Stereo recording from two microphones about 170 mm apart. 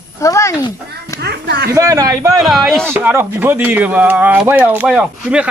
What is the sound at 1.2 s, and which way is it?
Speech, 75° right (ahead or behind).